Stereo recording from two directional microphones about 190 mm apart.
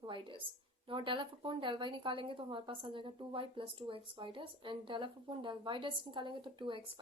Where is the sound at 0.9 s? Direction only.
25° right (ahead or behind).